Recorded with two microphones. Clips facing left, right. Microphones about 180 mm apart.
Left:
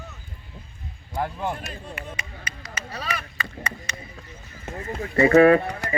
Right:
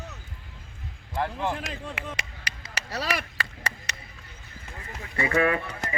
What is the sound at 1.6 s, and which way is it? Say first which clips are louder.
Chop: right 1 dB; 90° right.